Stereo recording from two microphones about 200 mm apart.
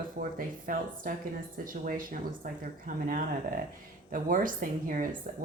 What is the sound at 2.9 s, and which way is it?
Speech, 45° right (ahead or behind).